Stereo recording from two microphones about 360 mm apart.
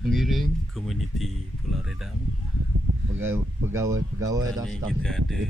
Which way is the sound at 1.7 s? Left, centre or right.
Centre.